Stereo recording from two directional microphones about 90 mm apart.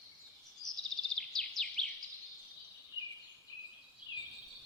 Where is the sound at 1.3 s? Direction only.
5° left (ahead or behind).